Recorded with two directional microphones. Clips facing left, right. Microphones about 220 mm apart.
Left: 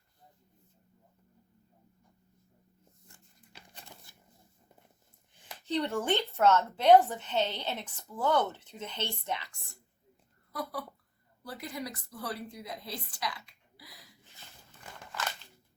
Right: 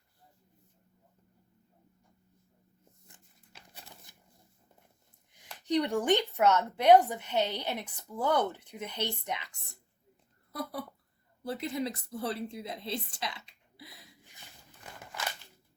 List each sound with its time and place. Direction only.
4.1 s a sound: 15° right (ahead or behind)
5.6 s a woman's voice: 15° right (ahead or behind)
10.5 s a woman's voice: 25° right (ahead or behind)
14.9 s scissors: 15° right (ahead or behind)